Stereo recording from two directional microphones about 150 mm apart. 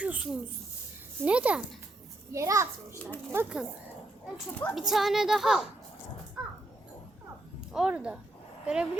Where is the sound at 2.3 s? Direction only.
20° right (ahead or behind).